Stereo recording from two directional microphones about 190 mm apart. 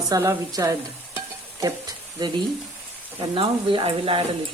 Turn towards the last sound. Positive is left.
turn(degrees=-30)  # may be behind; listen again after turning